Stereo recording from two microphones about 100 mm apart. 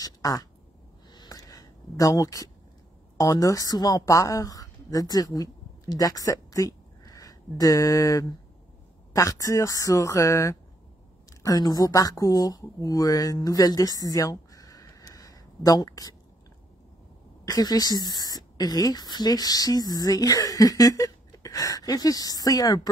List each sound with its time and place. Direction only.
0.0 s speech: 40° left (ahead or behind)
1.1 s a sound: 40° left (ahead or behind)
3.2 s a woman's voice: 35° left (ahead or behind)
17.5 s speech: 40° left (ahead or behind)